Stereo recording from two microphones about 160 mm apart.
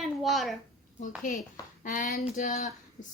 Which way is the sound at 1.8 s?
60° left (ahead or behind).